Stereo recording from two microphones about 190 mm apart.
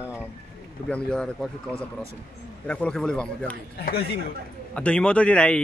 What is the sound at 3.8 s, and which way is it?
Speech, 55° left (ahead or behind).